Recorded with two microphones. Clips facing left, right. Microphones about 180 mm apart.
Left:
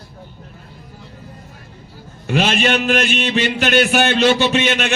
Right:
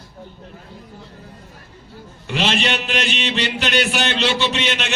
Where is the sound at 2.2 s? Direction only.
50° left (ahead or behind).